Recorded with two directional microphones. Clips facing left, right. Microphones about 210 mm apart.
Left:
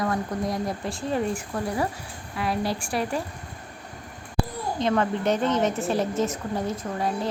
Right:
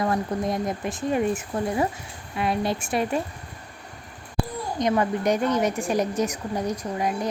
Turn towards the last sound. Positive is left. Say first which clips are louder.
# right 1 dB
turn(degrees=-15)  # may be behind; listen again after turning